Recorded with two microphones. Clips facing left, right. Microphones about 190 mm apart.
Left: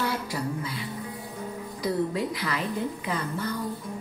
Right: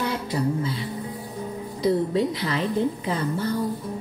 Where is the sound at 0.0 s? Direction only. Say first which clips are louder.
Right 4 dB; 25° right (ahead or behind).